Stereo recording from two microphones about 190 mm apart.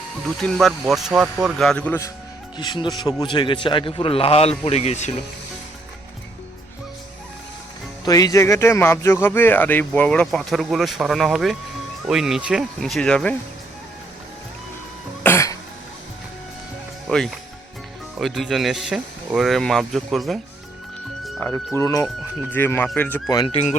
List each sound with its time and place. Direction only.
0.3 s speech: centre (ahead or behind)
2.6 s a man's voice: 25° left (ahead or behind)
8.0 s speech: 20° left (ahead or behind)
15.2 s cough: 15° left (ahead or behind)
17.1 s speech: 5° left (ahead or behind)
21.2 s music: centre (ahead or behind)
21.5 s speech: 15° left (ahead or behind)
23.3 s a man's voice: 20° left (ahead or behind)